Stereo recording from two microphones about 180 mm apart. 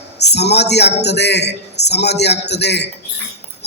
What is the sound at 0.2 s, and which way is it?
A man's voice, 70° left (ahead or behind).